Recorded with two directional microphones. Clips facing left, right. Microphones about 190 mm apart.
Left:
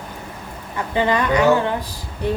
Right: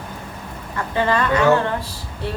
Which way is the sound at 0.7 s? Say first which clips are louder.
Left 1 dB; 15° left (ahead or behind).